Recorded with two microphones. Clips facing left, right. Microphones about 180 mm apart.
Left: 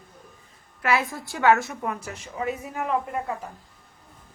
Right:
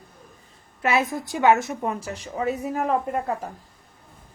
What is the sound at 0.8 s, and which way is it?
A woman's voice, 20° right (ahead or behind).